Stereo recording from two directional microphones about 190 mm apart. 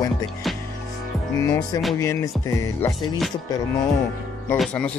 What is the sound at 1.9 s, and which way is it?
Speech, 15° left (ahead or behind).